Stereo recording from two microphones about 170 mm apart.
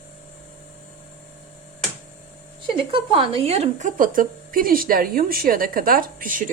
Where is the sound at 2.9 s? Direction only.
30° right (ahead or behind); by 6.5 s 55° right (ahead or behind).